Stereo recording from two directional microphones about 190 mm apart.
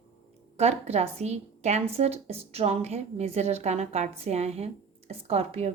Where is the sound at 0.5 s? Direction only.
35° right (ahead or behind).